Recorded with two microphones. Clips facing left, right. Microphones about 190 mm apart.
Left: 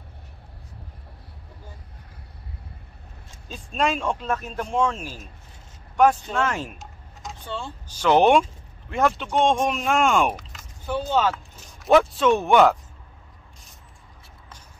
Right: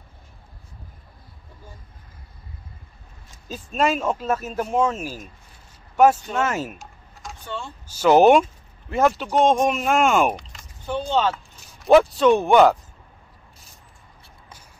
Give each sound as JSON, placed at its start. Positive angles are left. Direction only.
{"t": 3.5, "sound": "speech", "side_deg": -5}
{"t": 6.8, "sound": "a sound", "side_deg": 20}
{"t": 7.9, "sound": "speech", "side_deg": -5}